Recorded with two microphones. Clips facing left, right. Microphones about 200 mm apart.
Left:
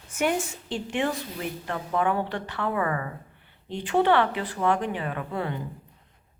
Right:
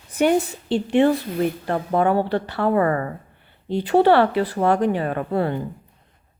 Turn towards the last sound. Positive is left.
turn(degrees=-40)  # may be behind; listen again after turning